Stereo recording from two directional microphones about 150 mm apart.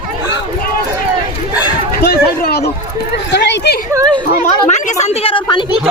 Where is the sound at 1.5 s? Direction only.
10° right (ahead or behind).